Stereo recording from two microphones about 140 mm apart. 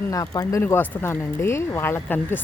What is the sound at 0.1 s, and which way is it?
Speech, 25° left (ahead or behind).